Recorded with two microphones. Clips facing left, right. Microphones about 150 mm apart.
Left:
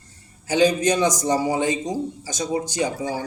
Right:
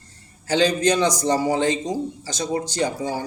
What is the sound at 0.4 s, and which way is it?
Speech, 15° left (ahead or behind).